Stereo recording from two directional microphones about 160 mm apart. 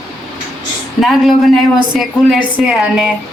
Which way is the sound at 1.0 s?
Centre (ahead or behind).